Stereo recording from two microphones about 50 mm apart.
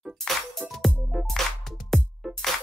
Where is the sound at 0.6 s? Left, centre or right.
Right.